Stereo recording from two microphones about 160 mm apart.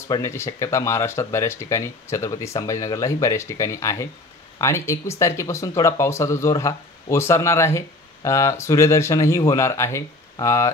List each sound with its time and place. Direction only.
0.1 s speech: 15° left (ahead or behind)